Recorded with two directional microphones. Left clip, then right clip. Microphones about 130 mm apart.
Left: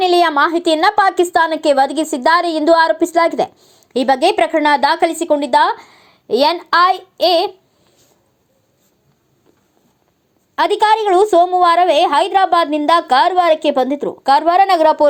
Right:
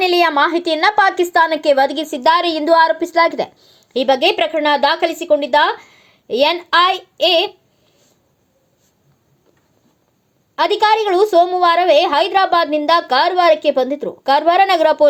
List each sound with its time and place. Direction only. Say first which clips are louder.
0.0 s a woman's voice: left 1 dB; 25° left (ahead or behind)
10.5 s a woman's voice: left 1 dB; 40° left (ahead or behind)